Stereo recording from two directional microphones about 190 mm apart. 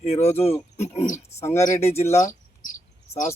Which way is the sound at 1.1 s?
15° left (ahead or behind).